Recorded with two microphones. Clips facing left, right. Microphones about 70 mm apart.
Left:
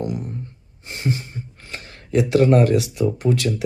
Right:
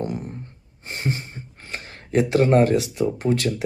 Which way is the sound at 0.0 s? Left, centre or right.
Right.